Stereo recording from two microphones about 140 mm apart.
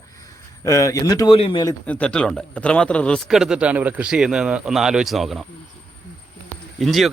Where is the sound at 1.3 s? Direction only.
40° left (ahead or behind).